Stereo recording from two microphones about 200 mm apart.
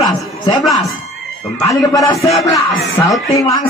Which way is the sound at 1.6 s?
15° left (ahead or behind).